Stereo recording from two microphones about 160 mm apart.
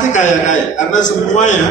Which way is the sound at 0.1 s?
50° left (ahead or behind).